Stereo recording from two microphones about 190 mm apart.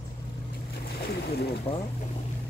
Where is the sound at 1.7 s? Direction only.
30° left (ahead or behind).